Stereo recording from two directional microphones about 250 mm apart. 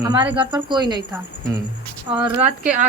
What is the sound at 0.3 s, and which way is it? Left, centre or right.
Speech, centre.